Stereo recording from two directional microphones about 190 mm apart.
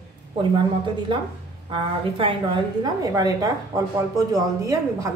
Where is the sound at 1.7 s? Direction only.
30° right (ahead or behind).